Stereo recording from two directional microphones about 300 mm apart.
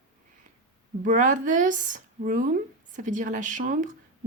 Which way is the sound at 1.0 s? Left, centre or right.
Right.